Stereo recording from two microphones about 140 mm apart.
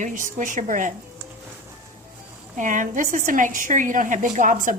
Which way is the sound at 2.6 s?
65° right (ahead or behind).